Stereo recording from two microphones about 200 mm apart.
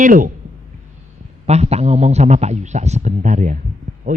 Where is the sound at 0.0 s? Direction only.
40° right (ahead or behind).